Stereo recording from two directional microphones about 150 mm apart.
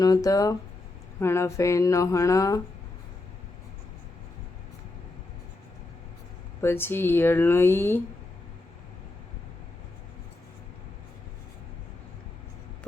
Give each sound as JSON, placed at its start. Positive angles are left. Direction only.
{"t": 0.0, "sound": "speech", "side_deg": 25}
{"t": 6.6, "sound": "speech", "side_deg": 15}